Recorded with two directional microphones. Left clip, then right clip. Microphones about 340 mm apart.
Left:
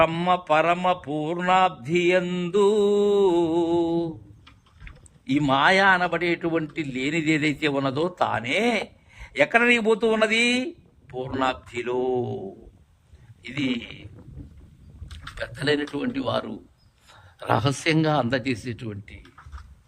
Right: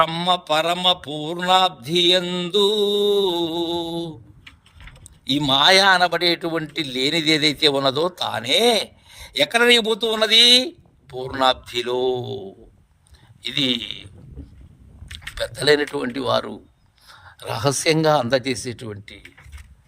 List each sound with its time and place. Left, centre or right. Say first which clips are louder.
0.0 s speech: right 2 dB; centre
0.4 s speech: even; centre
1.5 s mantra: right 3 dB; right
5.5 s speech: right 4 dB; centre
8.3 s mantra: right 6 dB; centre
9.6 s speech: right 4 dB; centre
10.0 s mantra: right 5 dB; right
11.1 s speech: right 6 dB; centre
15.4 s speech: right 7 dB; centre